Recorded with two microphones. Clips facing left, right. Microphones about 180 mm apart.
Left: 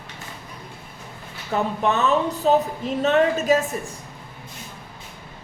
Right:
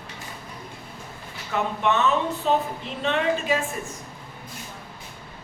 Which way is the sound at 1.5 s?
35° left (ahead or behind).